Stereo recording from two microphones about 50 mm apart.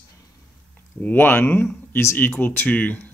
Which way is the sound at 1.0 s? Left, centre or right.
Left.